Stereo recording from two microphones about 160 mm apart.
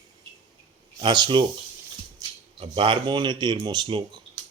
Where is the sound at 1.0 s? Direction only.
30° right (ahead or behind).